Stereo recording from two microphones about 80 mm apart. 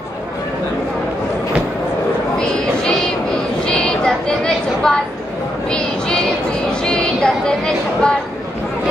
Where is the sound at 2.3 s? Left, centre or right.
Centre.